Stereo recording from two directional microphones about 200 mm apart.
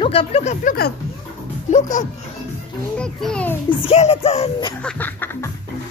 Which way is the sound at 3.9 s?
30° left (ahead or behind).